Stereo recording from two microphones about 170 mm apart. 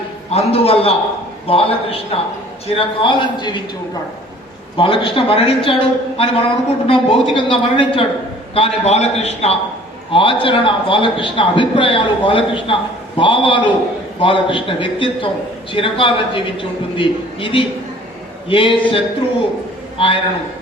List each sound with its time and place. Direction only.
0.3 s a man's voice: 35° left (ahead or behind)
4.8 s a man's voice: 30° left (ahead or behind)